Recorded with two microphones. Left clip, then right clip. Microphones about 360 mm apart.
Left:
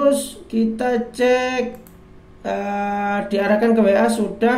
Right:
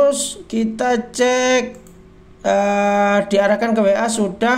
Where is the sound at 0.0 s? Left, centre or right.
Right.